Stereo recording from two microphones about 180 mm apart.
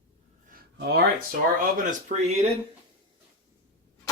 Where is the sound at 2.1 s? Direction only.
40° right (ahead or behind).